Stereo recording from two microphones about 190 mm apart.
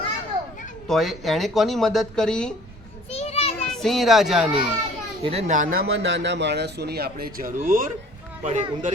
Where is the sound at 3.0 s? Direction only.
30° left (ahead or behind).